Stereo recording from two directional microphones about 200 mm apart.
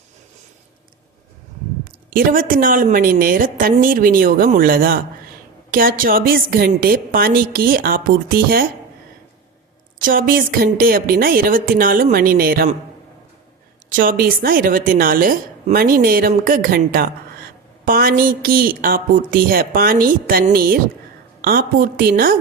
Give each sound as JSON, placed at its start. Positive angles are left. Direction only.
{"t": 2.0, "sound": "a woman's voice", "side_deg": -45}
{"t": 10.0, "sound": "a woman's voice", "side_deg": -45}
{"t": 13.9, "sound": "a woman's voice", "side_deg": -45}